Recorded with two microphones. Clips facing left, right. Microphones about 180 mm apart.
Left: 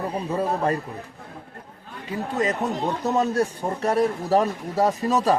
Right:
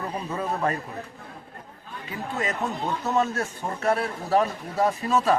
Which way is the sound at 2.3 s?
40° left (ahead or behind).